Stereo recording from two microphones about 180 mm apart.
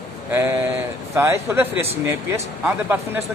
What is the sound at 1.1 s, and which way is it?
Speech, 15° right (ahead or behind).